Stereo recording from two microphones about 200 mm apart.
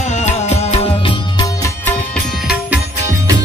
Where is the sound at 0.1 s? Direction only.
35° left (ahead or behind).